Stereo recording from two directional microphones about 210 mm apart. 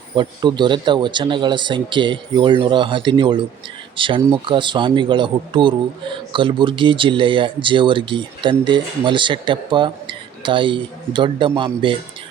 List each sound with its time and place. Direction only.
0.2 s speech: 20° right (ahead or behind)